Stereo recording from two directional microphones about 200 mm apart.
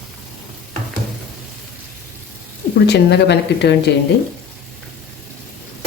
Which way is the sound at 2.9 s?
55° left (ahead or behind).